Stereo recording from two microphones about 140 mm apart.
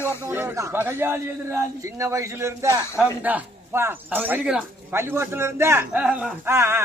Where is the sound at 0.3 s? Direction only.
20° right (ahead or behind).